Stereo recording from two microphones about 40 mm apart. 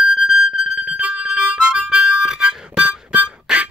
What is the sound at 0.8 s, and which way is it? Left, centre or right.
Harmonica, right.